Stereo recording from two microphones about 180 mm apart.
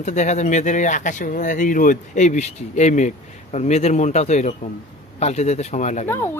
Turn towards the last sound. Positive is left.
turn(degrees=15)  # may be behind; listen again after turning